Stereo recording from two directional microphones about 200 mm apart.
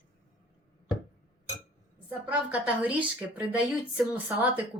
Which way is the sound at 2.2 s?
5° right (ahead or behind).